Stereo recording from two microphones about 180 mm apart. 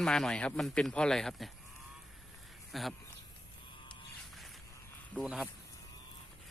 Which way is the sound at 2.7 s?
Centre (ahead or behind).